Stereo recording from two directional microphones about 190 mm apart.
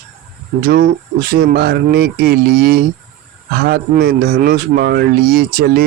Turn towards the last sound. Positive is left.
turn(degrees=-55)  # may be behind; listen again after turning